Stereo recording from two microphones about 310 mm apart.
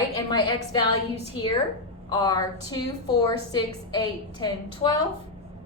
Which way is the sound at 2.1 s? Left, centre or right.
Centre.